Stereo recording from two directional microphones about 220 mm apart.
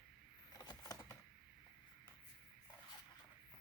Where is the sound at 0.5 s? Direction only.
15° left (ahead or behind).